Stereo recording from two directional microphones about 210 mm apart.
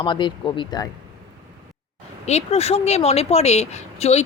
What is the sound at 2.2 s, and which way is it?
Speech, 30° left (ahead or behind).